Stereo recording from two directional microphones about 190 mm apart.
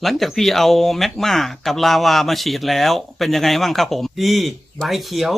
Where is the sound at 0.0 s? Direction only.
Centre (ahead or behind).